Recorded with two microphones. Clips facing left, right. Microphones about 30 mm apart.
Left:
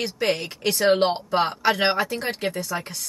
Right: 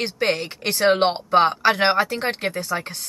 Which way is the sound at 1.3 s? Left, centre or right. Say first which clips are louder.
Right 6 dB; right.